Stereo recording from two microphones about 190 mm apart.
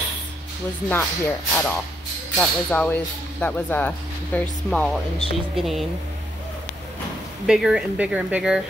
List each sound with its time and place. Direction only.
0.8 s speech: 10° left (ahead or behind)
7.4 s speech: 5° right (ahead or behind)